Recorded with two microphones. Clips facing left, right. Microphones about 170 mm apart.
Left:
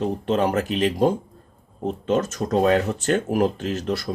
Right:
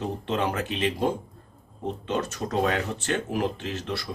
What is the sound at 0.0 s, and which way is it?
Speech, 40° left (ahead or behind).